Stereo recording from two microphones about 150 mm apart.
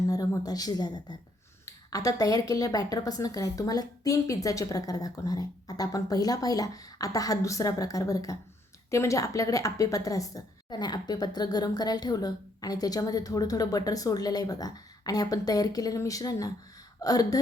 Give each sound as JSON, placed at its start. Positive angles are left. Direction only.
{"t": 0.1, "sound": "a woman's voice", "side_deg": 25}